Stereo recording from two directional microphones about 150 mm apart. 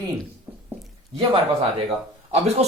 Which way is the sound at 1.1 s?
40° right (ahead or behind).